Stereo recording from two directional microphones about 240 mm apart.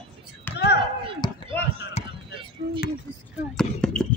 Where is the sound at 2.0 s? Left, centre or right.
Left.